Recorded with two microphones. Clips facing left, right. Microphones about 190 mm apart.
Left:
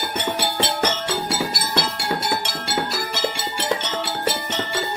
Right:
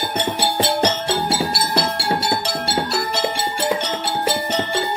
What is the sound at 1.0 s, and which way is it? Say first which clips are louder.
Music: right 3 dB; 30° right (ahead or behind).